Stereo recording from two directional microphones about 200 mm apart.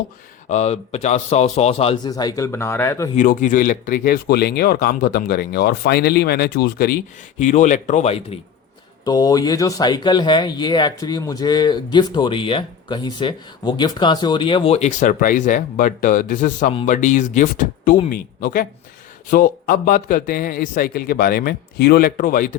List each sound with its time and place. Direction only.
0.4 s speech: 35° left (ahead or behind); by 3.1 s 10° left (ahead or behind)
3.2 s speech: 40° left (ahead or behind)
9.0 s speech: 20° left (ahead or behind); by 22.5 s 45° left (ahead or behind)